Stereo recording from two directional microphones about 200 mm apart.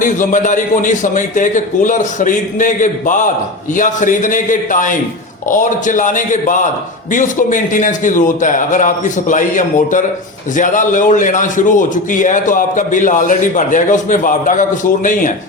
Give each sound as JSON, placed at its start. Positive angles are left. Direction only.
{"t": 0.0, "sound": "a man's voice", "side_deg": 40}